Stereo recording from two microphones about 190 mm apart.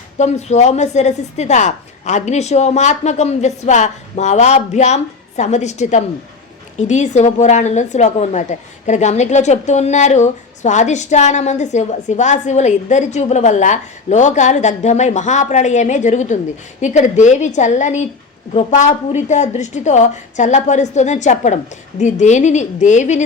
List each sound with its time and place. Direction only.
0.2 s a woman's voice: 35° left (ahead or behind)